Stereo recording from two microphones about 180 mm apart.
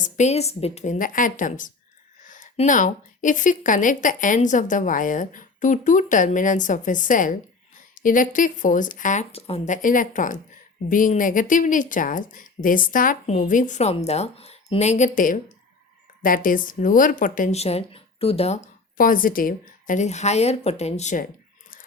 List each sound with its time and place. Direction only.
0.0 s a woman's voice: 40° left (ahead or behind)
18.9 s speech: 50° left (ahead or behind)